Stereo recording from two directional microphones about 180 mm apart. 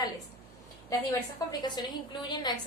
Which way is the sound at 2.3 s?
25° left (ahead or behind).